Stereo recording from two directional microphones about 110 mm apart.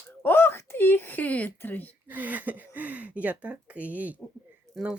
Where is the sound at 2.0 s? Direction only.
15° right (ahead or behind).